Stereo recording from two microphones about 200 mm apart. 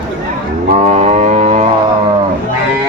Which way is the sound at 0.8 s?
35° right (ahead or behind).